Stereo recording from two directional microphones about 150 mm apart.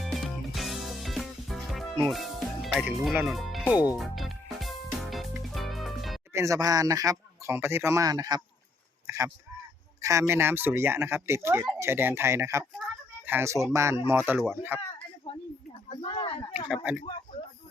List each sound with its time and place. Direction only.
0.0 s music: centre (ahead or behind)
3.8 s speech: 10° right (ahead or behind)
4.0 s music: centre (ahead or behind)
6.3 s speech: 20° right (ahead or behind)
9.0 s a sound: 20° right (ahead or behind)
10.0 s speech: 20° right (ahead or behind)
16.0 s speech: 35° left (ahead or behind)
16.6 s speech: 5° right (ahead or behind)